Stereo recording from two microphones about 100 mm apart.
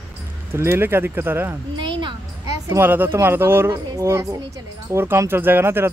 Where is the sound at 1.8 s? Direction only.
55° right (ahead or behind).